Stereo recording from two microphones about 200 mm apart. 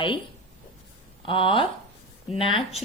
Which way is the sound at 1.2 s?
25° left (ahead or behind).